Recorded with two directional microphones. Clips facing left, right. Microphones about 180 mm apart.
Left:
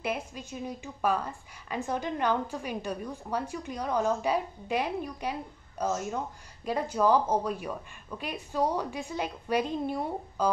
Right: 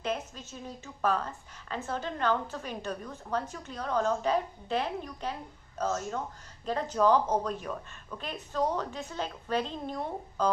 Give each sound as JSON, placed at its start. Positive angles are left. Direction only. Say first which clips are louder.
{"t": 0.0, "sound": "a woman's voice", "louder": "left 1 dB", "side_deg": 10}